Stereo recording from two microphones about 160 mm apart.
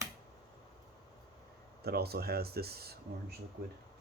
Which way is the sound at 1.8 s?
80° right.